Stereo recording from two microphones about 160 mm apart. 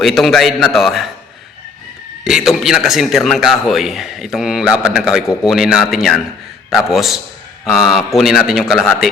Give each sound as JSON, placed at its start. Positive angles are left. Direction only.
{"t": 0.0, "sound": "a man's voice", "side_deg": 0}
{"t": 2.2, "sound": "a man's voice", "side_deg": 0}